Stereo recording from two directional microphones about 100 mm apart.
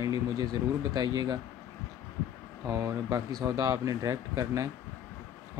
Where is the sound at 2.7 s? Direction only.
30° right (ahead or behind).